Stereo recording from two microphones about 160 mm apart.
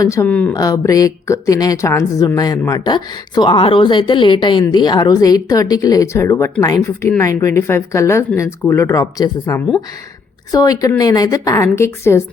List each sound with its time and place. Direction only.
0.0 s speech: 20° left (ahead or behind)
0.5 s speech: 20° left (ahead or behind)